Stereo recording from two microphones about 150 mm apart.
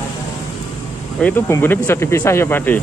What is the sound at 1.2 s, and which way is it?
Speech, 15° left (ahead or behind).